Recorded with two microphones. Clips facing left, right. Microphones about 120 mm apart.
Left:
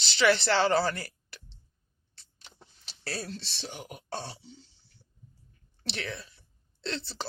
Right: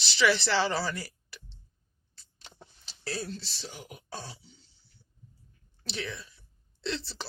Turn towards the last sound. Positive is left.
turn(degrees=50)  # may be behind; listen again after turning